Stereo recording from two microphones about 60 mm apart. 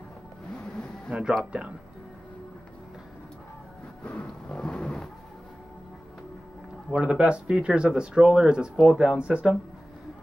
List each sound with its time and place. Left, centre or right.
1.1 s speech: right
4.0 s a sound: left
6.9 s speech: centre